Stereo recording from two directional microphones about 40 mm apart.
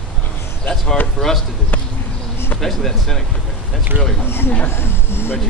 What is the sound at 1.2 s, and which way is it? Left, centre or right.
Speech, left.